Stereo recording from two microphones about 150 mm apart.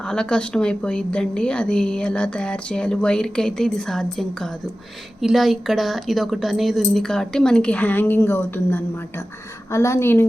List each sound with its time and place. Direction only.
0.0 s a woman's voice: 5° left (ahead or behind)